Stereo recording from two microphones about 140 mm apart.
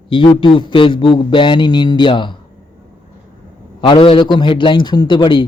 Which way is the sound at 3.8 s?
40° left (ahead or behind).